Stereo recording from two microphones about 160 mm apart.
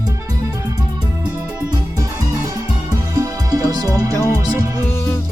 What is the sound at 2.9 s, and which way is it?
Music, 20° right (ahead or behind).